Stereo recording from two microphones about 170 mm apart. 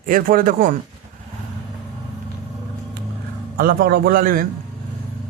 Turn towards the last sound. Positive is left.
turn(degrees=-55)  # may be behind; listen again after turning